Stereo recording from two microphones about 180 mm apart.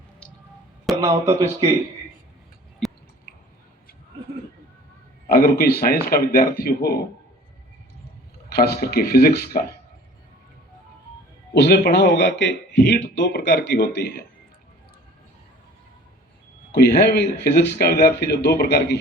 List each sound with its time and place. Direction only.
1.0 s speech: 15° right (ahead or behind)
2.8 s a sound: centre (ahead or behind)
5.3 s speech: 60° left (ahead or behind)
8.4 s speech: 60° left (ahead or behind)
11.5 s a man's voice: 70° left (ahead or behind)
16.7 s speech: 65° left (ahead or behind)